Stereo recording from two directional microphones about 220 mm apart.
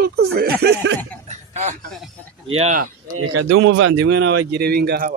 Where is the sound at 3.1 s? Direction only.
80° right.